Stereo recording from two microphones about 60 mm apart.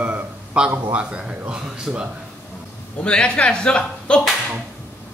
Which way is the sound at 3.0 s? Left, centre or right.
Centre.